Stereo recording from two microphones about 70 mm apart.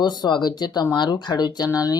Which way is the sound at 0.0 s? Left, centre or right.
Left.